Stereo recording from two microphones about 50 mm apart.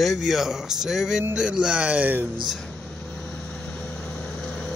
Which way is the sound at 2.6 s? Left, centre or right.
Centre.